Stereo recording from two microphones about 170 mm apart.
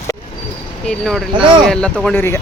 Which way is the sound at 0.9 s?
Centre (ahead or behind).